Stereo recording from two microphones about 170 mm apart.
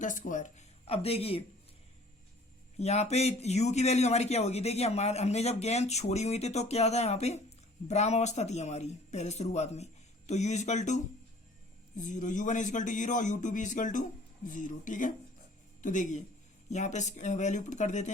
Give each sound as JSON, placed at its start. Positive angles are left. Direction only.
{"t": 0.0, "sound": "speech", "side_deg": 50}
{"t": 2.7, "sound": "a man's voice", "side_deg": 40}